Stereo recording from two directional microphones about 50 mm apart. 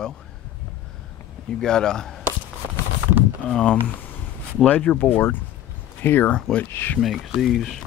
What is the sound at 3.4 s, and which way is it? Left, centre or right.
Speech, centre.